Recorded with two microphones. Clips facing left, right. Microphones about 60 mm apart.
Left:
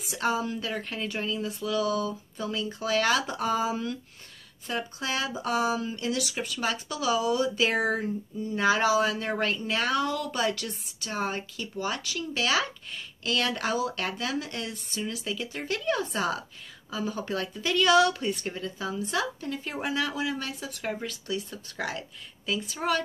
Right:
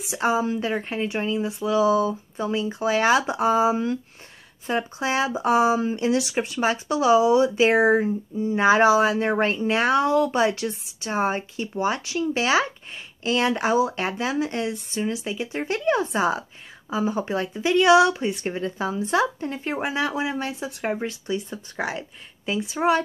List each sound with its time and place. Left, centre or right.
0.1 s speech: centre
18.4 s speech: right